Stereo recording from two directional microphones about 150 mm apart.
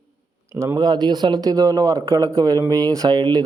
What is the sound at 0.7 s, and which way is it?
Speech, 30° right (ahead or behind).